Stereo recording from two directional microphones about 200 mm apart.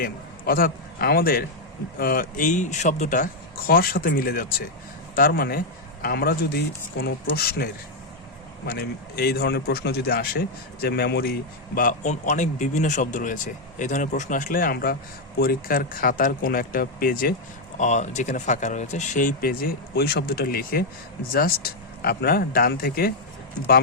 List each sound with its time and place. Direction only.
0.0 s a man's voice: 45° left (ahead or behind)
17.7 s speech: 35° left (ahead or behind)